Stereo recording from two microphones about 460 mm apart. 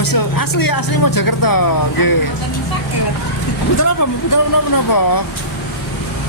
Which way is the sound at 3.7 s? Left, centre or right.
Left.